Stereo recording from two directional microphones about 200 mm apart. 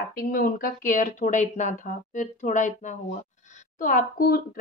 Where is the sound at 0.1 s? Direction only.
45° left (ahead or behind).